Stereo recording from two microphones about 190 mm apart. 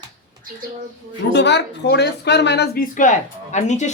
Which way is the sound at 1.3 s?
65° left (ahead or behind).